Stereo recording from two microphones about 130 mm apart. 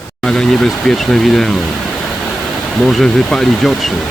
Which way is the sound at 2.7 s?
Centre (ahead or behind).